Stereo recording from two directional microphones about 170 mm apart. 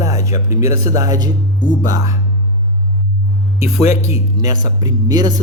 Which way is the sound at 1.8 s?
20° right (ahead or behind).